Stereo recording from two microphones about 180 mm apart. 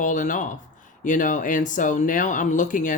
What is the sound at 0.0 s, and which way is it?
Speech, 45° left (ahead or behind).